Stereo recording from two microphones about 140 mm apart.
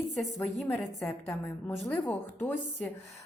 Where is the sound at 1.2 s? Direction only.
15° left (ahead or behind).